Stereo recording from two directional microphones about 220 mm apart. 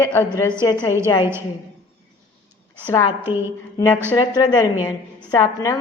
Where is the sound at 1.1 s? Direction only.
20° left (ahead or behind).